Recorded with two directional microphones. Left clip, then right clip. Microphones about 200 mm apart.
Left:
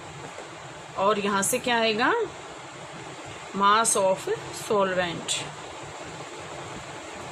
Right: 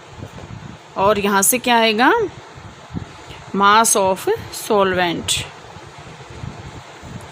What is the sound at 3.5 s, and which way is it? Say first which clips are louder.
Speech: right 8 dB; 55° right (ahead or behind).